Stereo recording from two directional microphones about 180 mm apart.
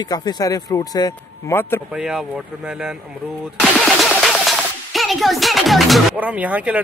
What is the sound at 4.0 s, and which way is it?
Speech, centre (ahead or behind).